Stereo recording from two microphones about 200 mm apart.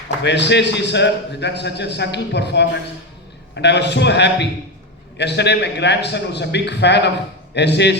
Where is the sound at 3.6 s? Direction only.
60° left (ahead or behind).